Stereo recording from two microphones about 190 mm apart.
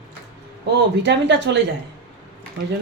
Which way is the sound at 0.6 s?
65° right (ahead or behind).